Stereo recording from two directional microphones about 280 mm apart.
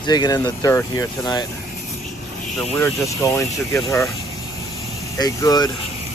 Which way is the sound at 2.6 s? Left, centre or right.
Centre.